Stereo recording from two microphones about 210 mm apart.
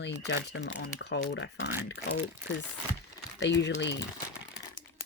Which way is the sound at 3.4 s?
55° left (ahead or behind).